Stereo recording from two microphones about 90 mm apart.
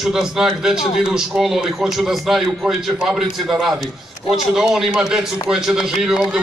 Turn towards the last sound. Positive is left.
turn(degrees=-5)  # may be behind; listen again after turning